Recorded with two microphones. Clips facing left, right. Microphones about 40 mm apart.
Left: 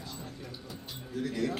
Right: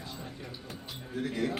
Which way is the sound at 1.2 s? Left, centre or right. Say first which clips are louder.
Even; right.